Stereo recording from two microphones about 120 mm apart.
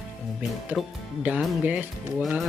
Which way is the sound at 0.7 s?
5° left (ahead or behind).